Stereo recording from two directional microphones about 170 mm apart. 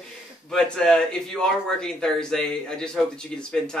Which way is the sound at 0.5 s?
5° left (ahead or behind).